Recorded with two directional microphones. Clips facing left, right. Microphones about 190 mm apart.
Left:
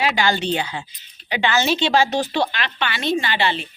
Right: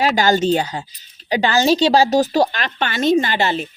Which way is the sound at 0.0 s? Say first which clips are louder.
Right 5 dB; 40° right (ahead or behind).